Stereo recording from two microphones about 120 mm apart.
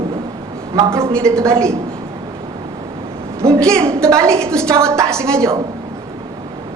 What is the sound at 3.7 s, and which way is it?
Speech, 25° right (ahead or behind).